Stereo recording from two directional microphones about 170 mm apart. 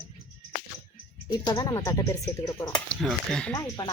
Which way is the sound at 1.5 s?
20° left (ahead or behind).